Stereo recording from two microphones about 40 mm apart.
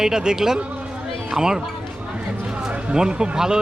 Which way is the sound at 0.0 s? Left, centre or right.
Centre.